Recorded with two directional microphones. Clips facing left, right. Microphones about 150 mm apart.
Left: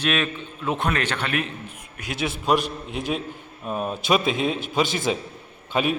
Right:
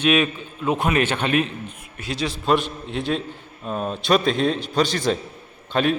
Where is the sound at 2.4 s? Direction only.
10° left (ahead or behind).